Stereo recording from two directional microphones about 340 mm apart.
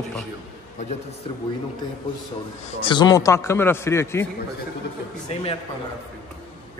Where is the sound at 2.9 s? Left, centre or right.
Centre.